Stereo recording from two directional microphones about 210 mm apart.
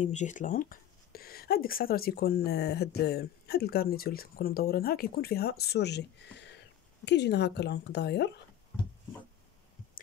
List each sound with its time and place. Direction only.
0.0 s speech: 35° left (ahead or behind); by 8.3 s 55° left (ahead or behind)